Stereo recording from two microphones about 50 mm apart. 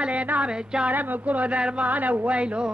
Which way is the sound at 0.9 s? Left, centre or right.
Right.